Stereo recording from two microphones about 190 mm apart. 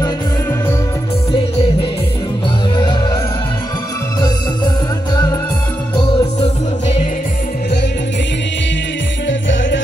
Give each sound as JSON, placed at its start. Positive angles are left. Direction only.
{"t": 2.7, "sound": "music", "side_deg": 25}
{"t": 5.9, "sound": "music", "side_deg": 35}
{"t": 9.3, "sound": "music", "side_deg": 75}